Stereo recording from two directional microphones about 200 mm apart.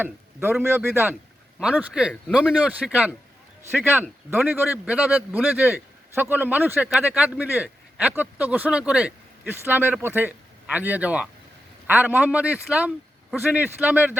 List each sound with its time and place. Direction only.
0.0 s a man's voice: 10° right (ahead or behind)